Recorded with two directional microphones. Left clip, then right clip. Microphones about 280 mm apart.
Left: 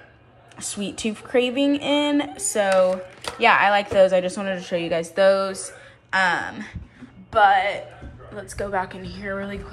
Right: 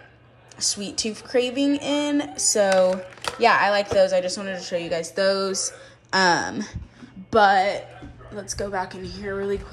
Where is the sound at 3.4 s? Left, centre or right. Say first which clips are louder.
Left 2 dB; centre.